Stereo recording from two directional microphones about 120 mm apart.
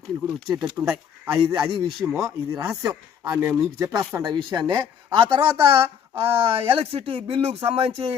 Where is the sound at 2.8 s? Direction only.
30° right (ahead or behind).